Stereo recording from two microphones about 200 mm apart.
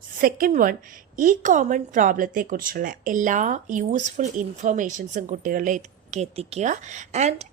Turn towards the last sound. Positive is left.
turn(degrees=-35)  # may be behind; listen again after turning